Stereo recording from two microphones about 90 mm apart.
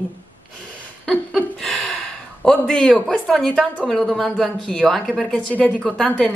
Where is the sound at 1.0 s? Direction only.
5° left (ahead or behind).